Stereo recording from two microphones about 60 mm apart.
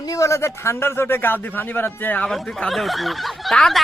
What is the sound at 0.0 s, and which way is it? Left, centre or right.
Speech, left.